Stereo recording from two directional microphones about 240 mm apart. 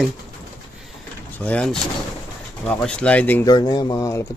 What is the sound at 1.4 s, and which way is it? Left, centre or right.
Speech, centre.